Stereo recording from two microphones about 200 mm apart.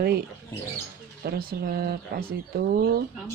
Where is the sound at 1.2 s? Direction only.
45° right (ahead or behind).